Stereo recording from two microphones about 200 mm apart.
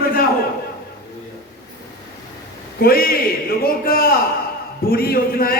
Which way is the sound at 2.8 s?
50° left (ahead or behind).